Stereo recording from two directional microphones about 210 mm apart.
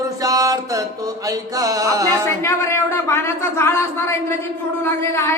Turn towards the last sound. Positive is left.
turn(degrees=10)  # may be behind; listen again after turning